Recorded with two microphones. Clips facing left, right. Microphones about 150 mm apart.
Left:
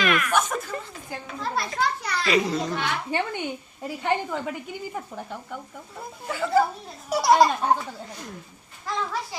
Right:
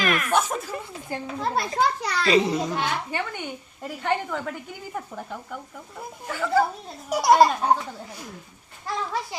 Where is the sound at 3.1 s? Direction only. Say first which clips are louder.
Left 3 dB; 20° left (ahead or behind).